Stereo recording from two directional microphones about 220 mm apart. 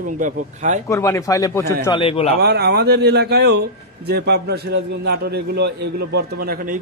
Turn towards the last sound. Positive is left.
turn(degrees=-40)  # may be behind; listen again after turning